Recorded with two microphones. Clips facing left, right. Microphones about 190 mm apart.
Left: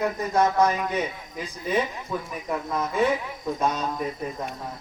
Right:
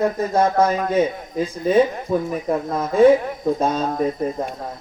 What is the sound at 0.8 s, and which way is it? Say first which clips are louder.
A man's voice: right 8 dB; 45° right (ahead or behind).